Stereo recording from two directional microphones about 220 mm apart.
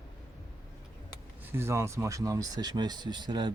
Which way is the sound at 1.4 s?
10° right (ahead or behind).